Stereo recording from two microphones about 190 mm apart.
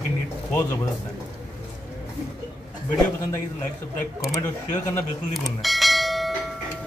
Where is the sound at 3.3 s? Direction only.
15° left (ahead or behind).